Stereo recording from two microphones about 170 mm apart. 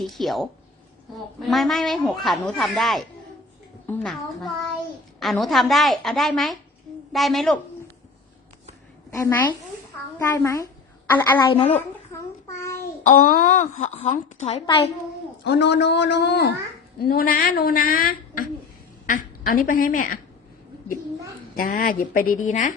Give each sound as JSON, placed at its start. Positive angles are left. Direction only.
{"t": 0.0, "sound": "speech", "side_deg": 0}
{"t": 1.5, "sound": "speech", "side_deg": 0}
{"t": 5.2, "sound": "speech", "side_deg": 0}
{"t": 9.0, "sound": "a woman's voice", "side_deg": 15}
{"t": 12.1, "sound": "child singing", "side_deg": 15}
{"t": 13.0, "sound": "a woman's voice", "side_deg": 50}
{"t": 15.4, "sound": "a man's voice", "side_deg": 90}
{"t": 17.0, "sound": "a woman's voice", "side_deg": 65}
{"t": 21.5, "sound": "a woman's voice", "side_deg": 55}